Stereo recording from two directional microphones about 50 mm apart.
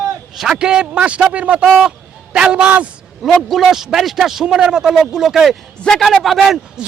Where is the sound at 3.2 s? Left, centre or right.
Centre.